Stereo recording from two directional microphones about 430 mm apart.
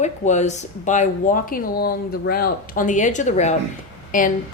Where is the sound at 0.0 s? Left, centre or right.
Centre.